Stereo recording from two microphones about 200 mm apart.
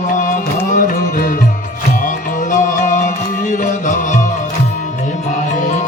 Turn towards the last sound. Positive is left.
turn(degrees=40)  # may be behind; listen again after turning